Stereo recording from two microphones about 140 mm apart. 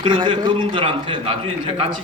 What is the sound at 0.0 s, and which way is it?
A man's voice, 35° right (ahead or behind).